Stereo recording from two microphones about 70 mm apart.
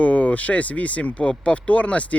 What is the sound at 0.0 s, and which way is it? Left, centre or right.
Speech, left.